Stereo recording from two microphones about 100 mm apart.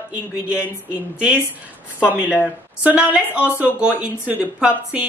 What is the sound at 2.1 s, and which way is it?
Speech, 15° right (ahead or behind).